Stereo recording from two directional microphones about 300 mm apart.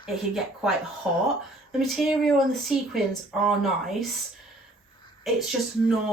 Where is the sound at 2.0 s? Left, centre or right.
Centre.